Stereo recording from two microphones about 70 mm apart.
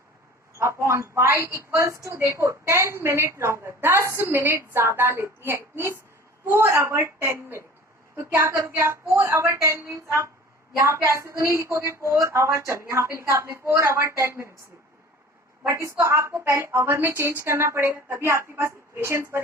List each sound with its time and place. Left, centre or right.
0.6 s a woman's voice: right
8.4 s a woman's voice: right
8.8 s a woman's voice: right
9.2 s a woman's voice: right
15.6 s a woman's voice: right